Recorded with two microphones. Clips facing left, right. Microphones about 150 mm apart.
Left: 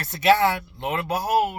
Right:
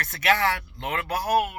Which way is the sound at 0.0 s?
25° left (ahead or behind).